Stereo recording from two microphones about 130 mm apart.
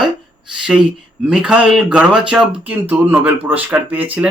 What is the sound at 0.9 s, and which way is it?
Speech, 5° right (ahead or behind).